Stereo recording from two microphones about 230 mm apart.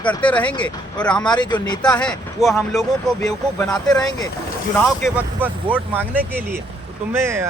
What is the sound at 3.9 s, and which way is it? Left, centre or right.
Speech, centre.